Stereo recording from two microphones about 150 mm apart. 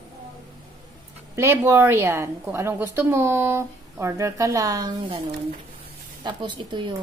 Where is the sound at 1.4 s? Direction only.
15° right (ahead or behind).